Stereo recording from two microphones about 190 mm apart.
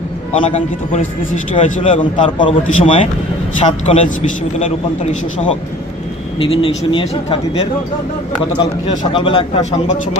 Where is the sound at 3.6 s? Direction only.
35° left (ahead or behind).